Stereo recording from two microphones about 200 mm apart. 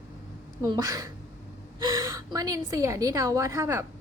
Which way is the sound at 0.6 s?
20° right (ahead or behind).